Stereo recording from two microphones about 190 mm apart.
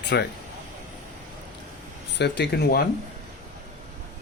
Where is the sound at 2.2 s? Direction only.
65° left (ahead or behind).